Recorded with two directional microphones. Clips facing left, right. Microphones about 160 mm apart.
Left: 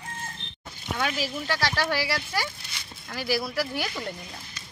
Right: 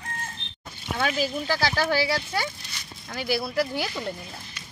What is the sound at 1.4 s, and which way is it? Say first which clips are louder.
Speech: even; 10° right (ahead or behind).